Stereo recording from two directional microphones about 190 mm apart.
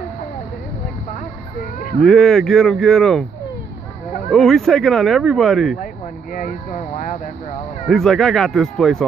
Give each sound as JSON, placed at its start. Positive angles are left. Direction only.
{"t": 1.6, "sound": "a sound", "side_deg": 50}
{"t": 2.0, "sound": "speech", "side_deg": 0}
{"t": 4.3, "sound": "speech", "side_deg": 0}
{"t": 6.3, "sound": "speech", "side_deg": 45}
{"t": 7.9, "sound": "speech", "side_deg": 0}